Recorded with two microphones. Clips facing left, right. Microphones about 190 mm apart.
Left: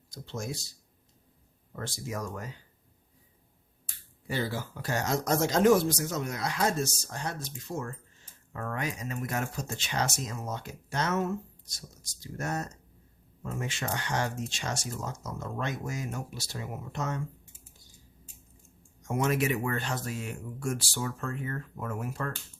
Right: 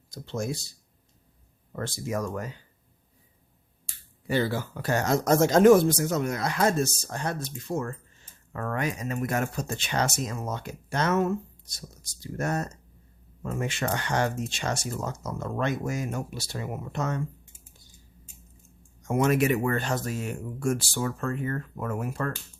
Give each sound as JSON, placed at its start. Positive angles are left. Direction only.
{"t": 0.1, "sound": "speech", "side_deg": -60}
{"t": 1.7, "sound": "speech", "side_deg": -60}
{"t": 4.3, "sound": "speech", "side_deg": -65}
{"t": 19.0, "sound": "speech", "side_deg": -60}